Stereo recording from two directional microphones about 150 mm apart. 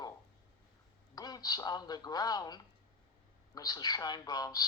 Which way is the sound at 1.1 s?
25° left (ahead or behind).